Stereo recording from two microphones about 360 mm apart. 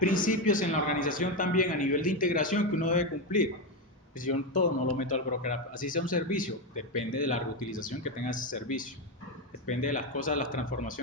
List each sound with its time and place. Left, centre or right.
0.0 s a man's voice: left